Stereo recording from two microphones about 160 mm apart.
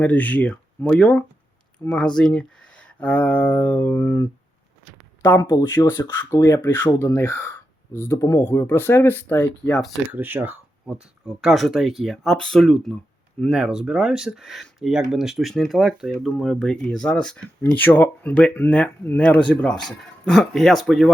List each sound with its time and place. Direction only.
0.0 s speech: 10° left (ahead or behind)
10.1 s speech: 15° right (ahead or behind)